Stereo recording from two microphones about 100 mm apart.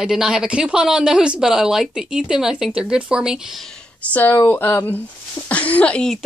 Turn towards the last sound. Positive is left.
turn(degrees=10)  # may be behind; listen again after turning